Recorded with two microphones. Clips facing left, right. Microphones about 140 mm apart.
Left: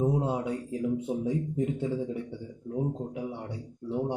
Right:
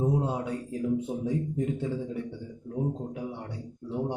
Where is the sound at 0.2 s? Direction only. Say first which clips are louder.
Left 1 dB; 20° left (ahead or behind).